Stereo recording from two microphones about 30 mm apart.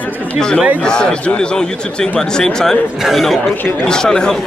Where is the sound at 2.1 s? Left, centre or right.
Centre.